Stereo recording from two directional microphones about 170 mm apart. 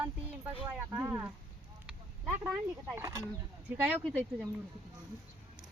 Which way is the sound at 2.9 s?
20° right (ahead or behind).